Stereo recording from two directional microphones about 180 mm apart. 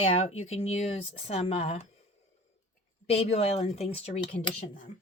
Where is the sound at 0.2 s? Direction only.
35° left (ahead or behind).